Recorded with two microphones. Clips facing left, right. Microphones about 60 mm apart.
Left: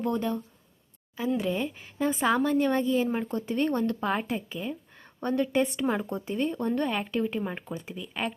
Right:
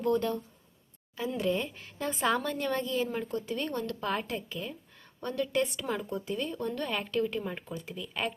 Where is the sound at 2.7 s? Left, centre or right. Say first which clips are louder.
Left 5 dB; left.